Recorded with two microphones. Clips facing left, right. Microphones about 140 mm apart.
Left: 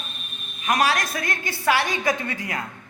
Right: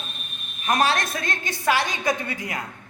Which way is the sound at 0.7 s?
30° right (ahead or behind).